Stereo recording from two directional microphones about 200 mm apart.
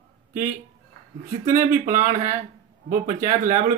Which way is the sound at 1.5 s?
40° right (ahead or behind).